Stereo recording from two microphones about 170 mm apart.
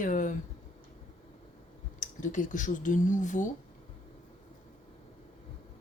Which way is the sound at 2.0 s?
50° left (ahead or behind).